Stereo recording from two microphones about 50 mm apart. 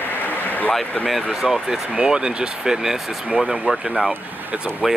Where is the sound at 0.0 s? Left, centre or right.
Left.